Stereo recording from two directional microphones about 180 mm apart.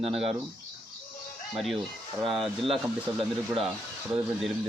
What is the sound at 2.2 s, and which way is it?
Speech, centre (ahead or behind).